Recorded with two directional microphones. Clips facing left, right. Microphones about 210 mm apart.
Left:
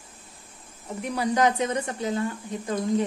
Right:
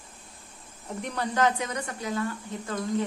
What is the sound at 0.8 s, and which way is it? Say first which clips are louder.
Speech: left 4 dB; 5° left (ahead or behind).